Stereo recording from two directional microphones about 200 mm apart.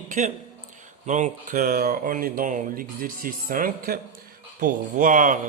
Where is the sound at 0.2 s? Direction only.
40° right (ahead or behind).